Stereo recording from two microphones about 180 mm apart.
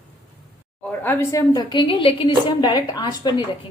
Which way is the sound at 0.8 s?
10° left (ahead or behind).